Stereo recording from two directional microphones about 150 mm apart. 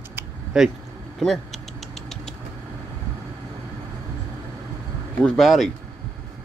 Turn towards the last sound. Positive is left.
turn(degrees=0)  # may be behind; listen again after turning